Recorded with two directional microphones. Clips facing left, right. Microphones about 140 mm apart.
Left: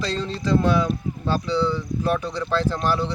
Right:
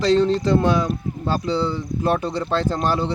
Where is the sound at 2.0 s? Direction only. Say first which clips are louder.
Right 3 dB; 35° right (ahead or behind).